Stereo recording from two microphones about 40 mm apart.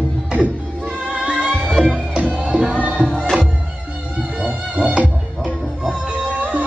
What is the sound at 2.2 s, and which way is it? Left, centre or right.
Music, right.